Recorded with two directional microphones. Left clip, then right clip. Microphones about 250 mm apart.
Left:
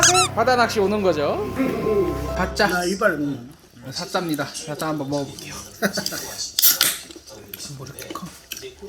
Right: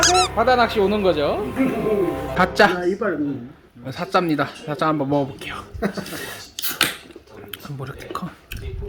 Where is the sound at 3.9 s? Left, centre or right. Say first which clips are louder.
Right 5 dB; centre.